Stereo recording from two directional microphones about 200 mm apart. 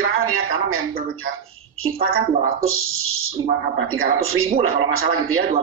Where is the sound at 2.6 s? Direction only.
90° right.